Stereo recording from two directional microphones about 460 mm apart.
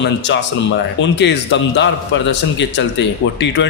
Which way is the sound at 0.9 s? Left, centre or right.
Left.